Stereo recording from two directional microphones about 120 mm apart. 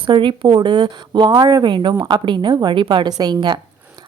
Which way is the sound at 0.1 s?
45° right (ahead or behind).